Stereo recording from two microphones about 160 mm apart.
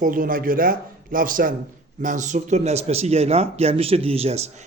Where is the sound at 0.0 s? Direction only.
60° right (ahead or behind).